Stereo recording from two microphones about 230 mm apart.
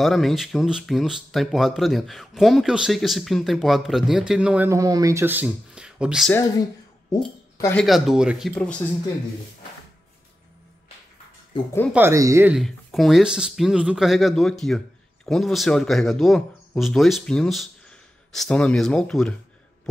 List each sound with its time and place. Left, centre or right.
0.0 s speech: centre
7.5 s speech: centre
7.8 s speech: centre
11.5 s speech: left
11.9 s speech: centre